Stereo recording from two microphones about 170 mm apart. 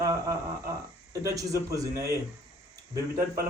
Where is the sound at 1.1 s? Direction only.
20° right (ahead or behind).